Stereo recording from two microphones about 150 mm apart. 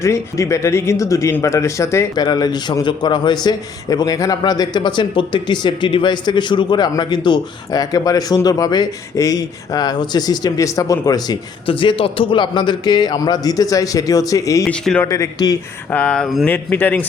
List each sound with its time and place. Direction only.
0.0 s speech: 20° left (ahead or behind)
14.6 s speech: 5° left (ahead or behind)
15.0 s speech: 25° left (ahead or behind)
15.9 s speech: 5° left (ahead or behind)